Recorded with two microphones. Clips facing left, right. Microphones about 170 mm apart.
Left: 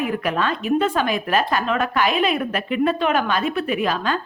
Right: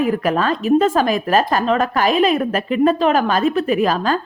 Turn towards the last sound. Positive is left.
turn(degrees=-40)  # may be behind; listen again after turning